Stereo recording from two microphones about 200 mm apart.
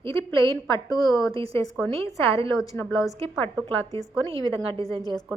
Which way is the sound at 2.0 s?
15° left (ahead or behind).